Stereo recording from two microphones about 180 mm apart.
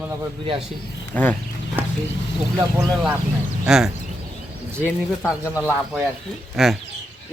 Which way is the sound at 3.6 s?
Centre (ahead or behind).